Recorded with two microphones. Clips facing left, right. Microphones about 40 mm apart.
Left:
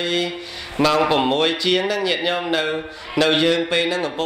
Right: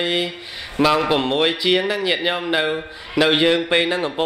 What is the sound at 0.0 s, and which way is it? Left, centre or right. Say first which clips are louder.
Speech: right 1 dB; right.